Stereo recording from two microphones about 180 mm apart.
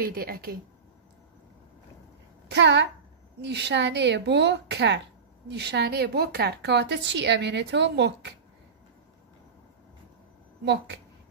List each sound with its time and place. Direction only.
0.0 s speech: 55° right (ahead or behind)
2.4 s a woman's voice: 75° right (ahead or behind)
10.6 s a woman's voice: 75° right (ahead or behind)